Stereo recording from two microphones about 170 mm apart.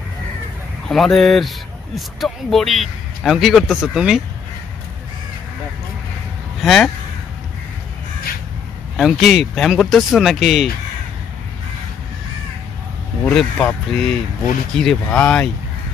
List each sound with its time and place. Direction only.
0.8 s a man's voice: centre (ahead or behind)
6.6 s a man's voice: centre (ahead or behind)
8.9 s a man's voice: centre (ahead or behind)
13.2 s a man's voice: 5° left (ahead or behind)